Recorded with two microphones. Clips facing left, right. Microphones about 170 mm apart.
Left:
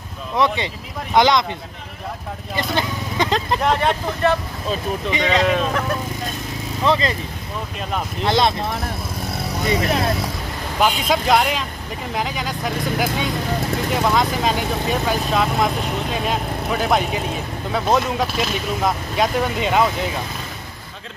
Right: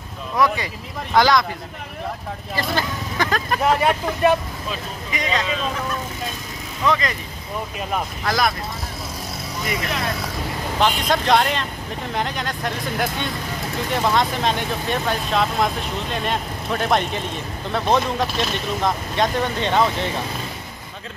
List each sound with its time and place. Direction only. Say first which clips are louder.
0.4 s speech: left 1 dB; 25° left (ahead or behind)
2.5 s speech: left 1 dB; 20° left (ahead or behind)
3.6 s speech: right 3 dB; 5° right (ahead or behind)
5.4 s speech: left 6 dB; 70° left (ahead or behind)
6.8 s speech: left 2 dB; 30° left (ahead or behind)
8.2 s speech: left 5 dB; 25° left (ahead or behind)
9.7 s speech: left 6 dB; 35° left (ahead or behind)
10.8 s speech: left 1 dB; 5° left (ahead or behind)